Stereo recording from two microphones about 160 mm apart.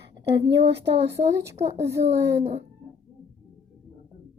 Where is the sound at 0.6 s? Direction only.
90° right.